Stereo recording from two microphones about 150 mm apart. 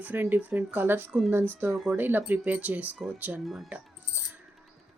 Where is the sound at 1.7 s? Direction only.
5° right (ahead or behind).